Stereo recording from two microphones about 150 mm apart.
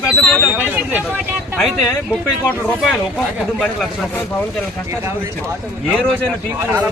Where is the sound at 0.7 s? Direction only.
10° right (ahead or behind).